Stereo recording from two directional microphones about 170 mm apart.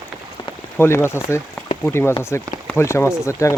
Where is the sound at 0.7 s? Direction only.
15° left (ahead or behind).